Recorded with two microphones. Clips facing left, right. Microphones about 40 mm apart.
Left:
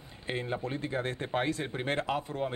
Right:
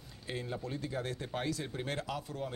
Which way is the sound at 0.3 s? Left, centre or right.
Left.